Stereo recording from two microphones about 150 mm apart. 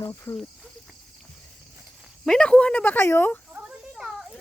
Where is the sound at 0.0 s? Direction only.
15° left (ahead or behind).